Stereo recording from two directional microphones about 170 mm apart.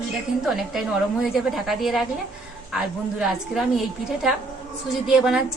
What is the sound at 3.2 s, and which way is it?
A woman's voice, centre (ahead or behind).